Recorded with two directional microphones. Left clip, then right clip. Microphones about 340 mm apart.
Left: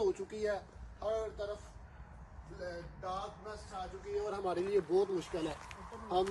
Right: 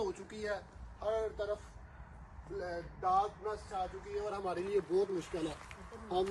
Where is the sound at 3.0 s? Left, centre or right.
Centre.